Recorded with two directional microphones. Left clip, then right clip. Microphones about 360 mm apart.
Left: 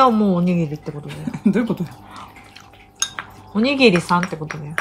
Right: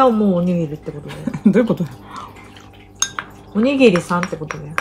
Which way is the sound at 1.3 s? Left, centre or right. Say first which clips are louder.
Right 5 dB; centre.